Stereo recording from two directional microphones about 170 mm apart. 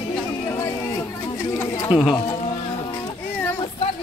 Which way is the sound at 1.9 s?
5° right (ahead or behind).